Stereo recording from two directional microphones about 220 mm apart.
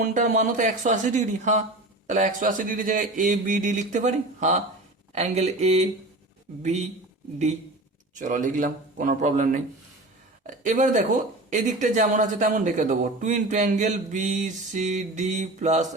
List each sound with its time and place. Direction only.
0.0 s speech: 35° right (ahead or behind)
8.1 s speech: 35° right (ahead or behind)